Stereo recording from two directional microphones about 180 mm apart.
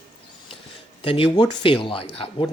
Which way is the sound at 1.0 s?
30° left (ahead or behind).